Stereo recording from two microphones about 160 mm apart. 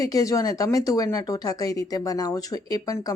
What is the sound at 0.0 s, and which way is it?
Speech, 20° left (ahead or behind).